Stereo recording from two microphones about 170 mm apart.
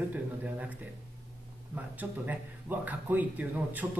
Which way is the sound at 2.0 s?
10° right (ahead or behind).